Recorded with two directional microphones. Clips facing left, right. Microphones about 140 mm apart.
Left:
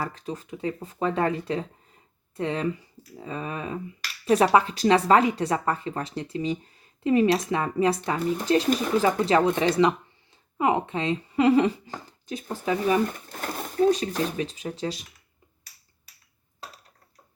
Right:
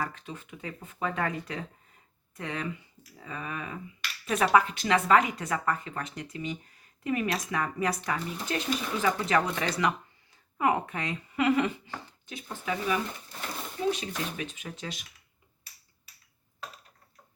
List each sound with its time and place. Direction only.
0.0 s speech: 35° left (ahead or behind)